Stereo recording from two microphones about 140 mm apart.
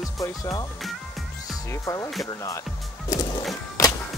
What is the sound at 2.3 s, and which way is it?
Music, 20° left (ahead or behind).